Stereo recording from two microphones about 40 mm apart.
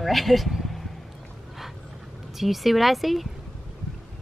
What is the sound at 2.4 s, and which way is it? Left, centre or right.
Speech, centre.